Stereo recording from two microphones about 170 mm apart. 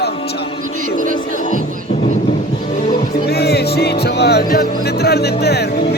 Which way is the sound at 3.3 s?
70° left (ahead or behind).